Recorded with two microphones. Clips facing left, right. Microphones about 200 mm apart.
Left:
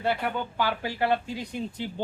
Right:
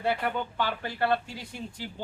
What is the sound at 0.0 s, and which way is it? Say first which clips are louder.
Speech: left 1 dB; centre (ahead or behind).